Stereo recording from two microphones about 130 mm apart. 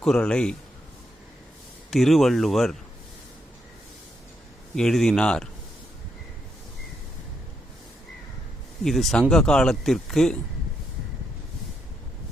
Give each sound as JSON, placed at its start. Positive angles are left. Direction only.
{"t": 0.0, "sound": "speech", "side_deg": 5}
{"t": 1.9, "sound": "speech", "side_deg": 0}
{"t": 4.7, "sound": "speech", "side_deg": 5}
{"t": 8.8, "sound": "speech", "side_deg": 0}